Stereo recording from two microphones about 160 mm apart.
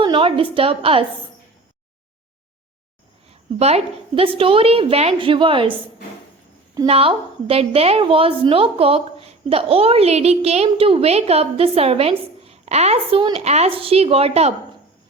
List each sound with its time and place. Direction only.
0.0 s a woman's voice: 30° right (ahead or behind)
3.6 s a woman's voice: 40° right (ahead or behind)
6.8 s a woman's voice: 35° right (ahead or behind)